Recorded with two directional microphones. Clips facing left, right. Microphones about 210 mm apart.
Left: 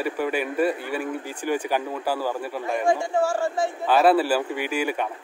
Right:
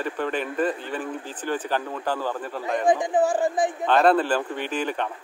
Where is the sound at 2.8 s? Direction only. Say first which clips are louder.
Right 2 dB; 15° right (ahead or behind).